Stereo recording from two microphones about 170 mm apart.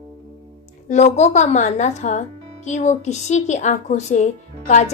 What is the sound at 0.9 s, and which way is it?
Speech, 45° left (ahead or behind).